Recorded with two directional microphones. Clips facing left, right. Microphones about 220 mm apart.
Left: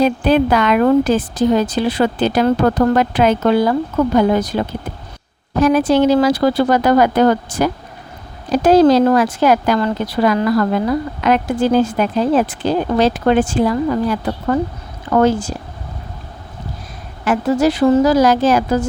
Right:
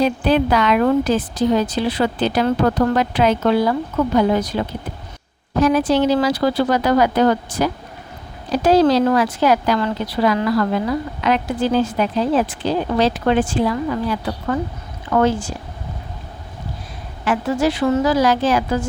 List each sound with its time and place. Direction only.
0.0 s a woman's voice: 50° left (ahead or behind)
17.2 s a woman's voice: 40° left (ahead or behind)